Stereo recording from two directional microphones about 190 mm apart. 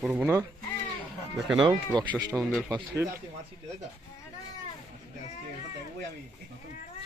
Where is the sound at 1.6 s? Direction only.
20° right (ahead or behind).